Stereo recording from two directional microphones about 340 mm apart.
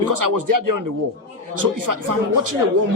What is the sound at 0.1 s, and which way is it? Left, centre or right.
Speech, right.